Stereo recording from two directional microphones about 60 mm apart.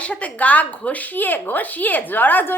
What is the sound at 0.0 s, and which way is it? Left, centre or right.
A woman's voice, left.